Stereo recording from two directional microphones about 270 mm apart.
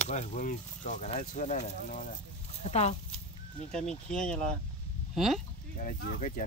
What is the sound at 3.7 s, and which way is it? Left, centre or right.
Speech, centre.